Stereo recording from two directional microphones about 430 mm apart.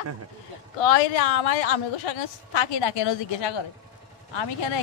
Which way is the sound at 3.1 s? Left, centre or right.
Left.